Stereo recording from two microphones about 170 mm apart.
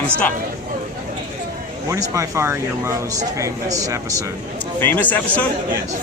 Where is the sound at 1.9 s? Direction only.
20° right (ahead or behind).